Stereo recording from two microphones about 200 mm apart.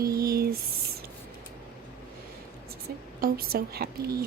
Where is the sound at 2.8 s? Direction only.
50° right (ahead or behind).